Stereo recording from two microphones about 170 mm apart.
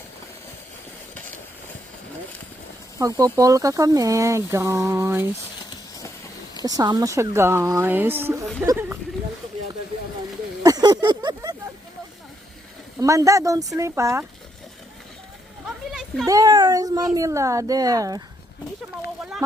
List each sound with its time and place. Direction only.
3.0 s speech: 20° right (ahead or behind)
6.7 s speech: 20° right (ahead or behind)
10.6 s speech: 25° right (ahead or behind)
13.0 s speech: 20° right (ahead or behind)
15.9 s a sound: 5° right (ahead or behind)
16.2 s speech: 20° right (ahead or behind)